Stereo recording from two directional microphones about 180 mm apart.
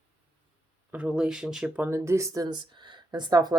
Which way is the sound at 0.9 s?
5° right (ahead or behind).